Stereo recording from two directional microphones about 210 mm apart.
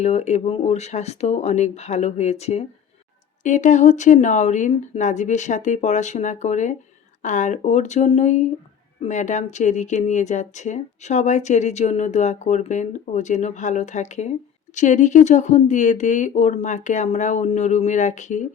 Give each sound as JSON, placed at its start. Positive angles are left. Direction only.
{"t": 0.0, "sound": "speech", "side_deg": 30}